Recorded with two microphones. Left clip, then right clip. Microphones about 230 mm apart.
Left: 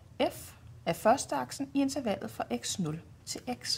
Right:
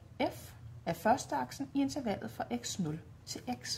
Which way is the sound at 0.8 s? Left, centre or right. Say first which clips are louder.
Left 4 dB; left.